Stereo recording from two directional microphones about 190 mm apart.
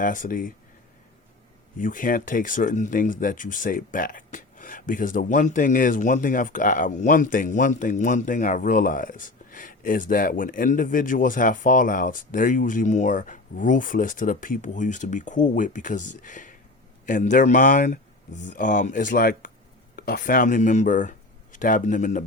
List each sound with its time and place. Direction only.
0.0 s speech: 45° left (ahead or behind)
1.8 s speech: 45° left (ahead or behind)